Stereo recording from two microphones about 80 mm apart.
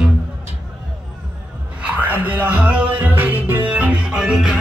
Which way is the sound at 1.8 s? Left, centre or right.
Centre.